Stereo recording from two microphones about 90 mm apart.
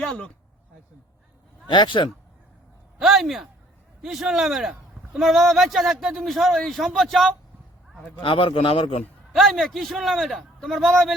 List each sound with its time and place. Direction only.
0.0 s speech: 10° left (ahead or behind)
1.6 s speech: 60° left (ahead or behind)
3.0 s a man's voice: 5° right (ahead or behind)
8.2 s a man's voice: 75° left (ahead or behind)
9.3 s a man's voice: centre (ahead or behind)